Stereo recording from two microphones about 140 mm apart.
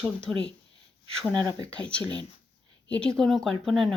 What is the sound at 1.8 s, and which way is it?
A woman's voice, 10° left (ahead or behind).